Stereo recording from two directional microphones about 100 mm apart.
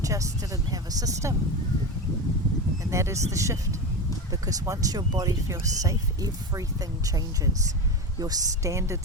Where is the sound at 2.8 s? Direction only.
30° right (ahead or behind).